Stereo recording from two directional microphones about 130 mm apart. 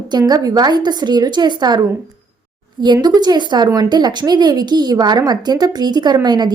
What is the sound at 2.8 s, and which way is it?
A woman's voice, 35° right (ahead or behind).